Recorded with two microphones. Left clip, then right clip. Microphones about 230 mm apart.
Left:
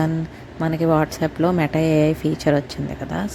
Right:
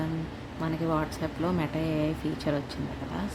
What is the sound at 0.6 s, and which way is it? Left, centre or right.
A woman's voice, left.